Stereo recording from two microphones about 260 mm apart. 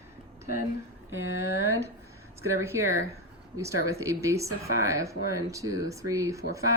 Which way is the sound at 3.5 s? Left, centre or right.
Centre.